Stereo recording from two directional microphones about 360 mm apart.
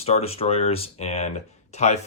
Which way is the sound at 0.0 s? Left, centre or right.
Centre.